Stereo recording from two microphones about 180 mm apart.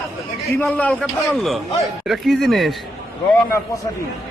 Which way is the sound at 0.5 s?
5° left (ahead or behind).